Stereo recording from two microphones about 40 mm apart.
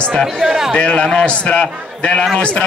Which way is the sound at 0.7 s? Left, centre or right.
Left.